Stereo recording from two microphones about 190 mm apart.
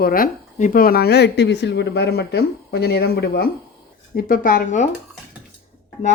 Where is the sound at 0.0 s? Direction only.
50° left (ahead or behind).